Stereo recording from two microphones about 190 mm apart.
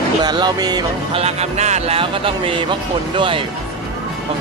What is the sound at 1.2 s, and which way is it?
Speech, 35° right (ahead or behind).